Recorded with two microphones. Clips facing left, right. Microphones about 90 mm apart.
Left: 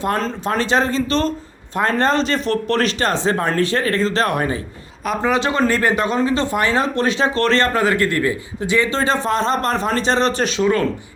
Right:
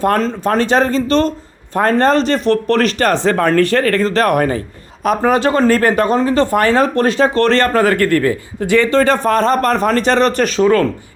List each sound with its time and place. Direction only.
0.0 s speech: 45° right (ahead or behind)